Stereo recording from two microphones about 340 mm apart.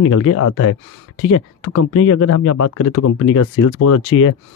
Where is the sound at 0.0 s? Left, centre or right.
Left.